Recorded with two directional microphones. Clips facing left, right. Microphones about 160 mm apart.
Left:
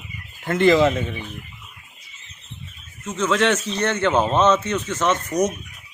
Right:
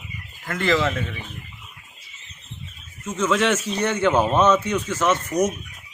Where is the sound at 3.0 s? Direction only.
5° right (ahead or behind).